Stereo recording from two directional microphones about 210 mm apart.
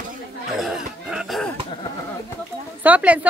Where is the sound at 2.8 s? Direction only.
5° right (ahead or behind).